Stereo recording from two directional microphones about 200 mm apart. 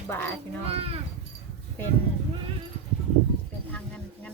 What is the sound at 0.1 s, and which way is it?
Speech, 10° left (ahead or behind).